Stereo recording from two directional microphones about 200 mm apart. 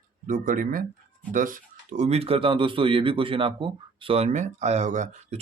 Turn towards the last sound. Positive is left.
turn(degrees=-35)  # may be behind; listen again after turning